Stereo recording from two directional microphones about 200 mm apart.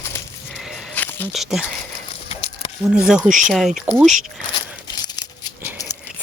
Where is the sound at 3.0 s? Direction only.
5° right (ahead or behind).